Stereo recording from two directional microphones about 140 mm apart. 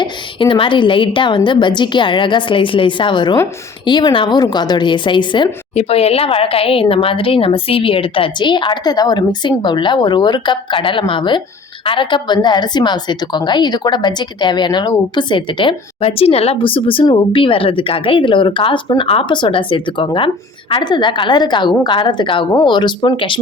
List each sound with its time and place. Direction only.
0.0 s a woman's voice: 35° left (ahead or behind)
5.7 s a woman's voice: 45° left (ahead or behind)